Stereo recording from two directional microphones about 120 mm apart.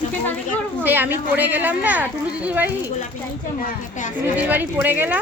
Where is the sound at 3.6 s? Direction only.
90° left.